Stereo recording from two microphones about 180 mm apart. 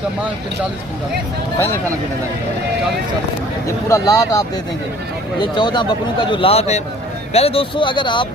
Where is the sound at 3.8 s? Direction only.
20° left (ahead or behind).